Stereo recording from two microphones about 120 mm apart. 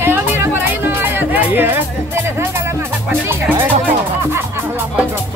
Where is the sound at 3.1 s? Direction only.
20° right (ahead or behind).